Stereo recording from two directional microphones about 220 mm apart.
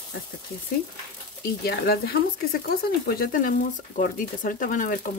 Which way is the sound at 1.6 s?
45° left (ahead or behind).